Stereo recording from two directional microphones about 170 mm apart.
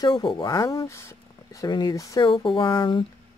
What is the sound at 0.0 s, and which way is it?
Speech, 25° left (ahead or behind).